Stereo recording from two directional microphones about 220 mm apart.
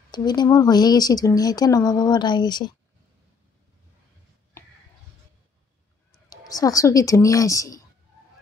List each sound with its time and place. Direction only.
0.1 s speech: 20° left (ahead or behind)
6.2 s a woman's voice: 15° left (ahead or behind)